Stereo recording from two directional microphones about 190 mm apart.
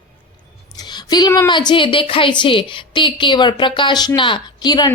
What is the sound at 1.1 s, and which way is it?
A woman's voice, 20° left (ahead or behind).